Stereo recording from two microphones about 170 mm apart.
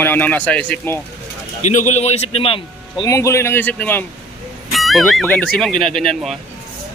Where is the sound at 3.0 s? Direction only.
15° left (ahead or behind).